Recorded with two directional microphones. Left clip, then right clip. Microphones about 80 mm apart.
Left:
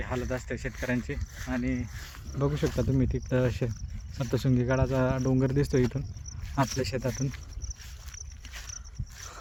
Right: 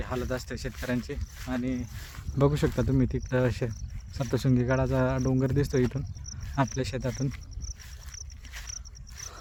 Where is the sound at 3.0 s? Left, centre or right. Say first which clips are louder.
Right 1 dB; centre.